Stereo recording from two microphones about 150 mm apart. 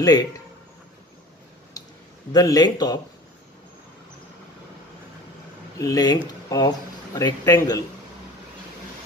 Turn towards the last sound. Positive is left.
turn(degrees=25)  # may be behind; listen again after turning